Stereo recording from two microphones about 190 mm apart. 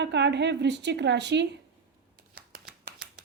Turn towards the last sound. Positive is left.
turn(degrees=-55)  # may be behind; listen again after turning